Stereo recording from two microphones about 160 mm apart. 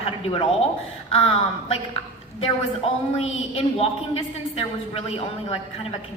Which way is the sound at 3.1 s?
35° left (ahead or behind).